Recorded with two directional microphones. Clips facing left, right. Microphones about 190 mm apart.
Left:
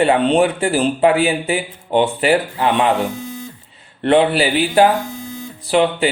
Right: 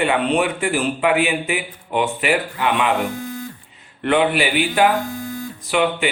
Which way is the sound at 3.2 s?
20° left (ahead or behind).